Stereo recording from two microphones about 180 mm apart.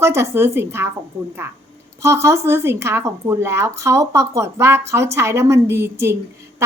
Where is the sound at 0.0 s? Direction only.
15° right (ahead or behind).